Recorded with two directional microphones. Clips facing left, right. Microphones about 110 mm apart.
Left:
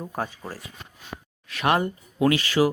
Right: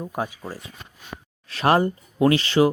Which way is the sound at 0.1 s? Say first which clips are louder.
Right 2 dB; 15° right (ahead or behind).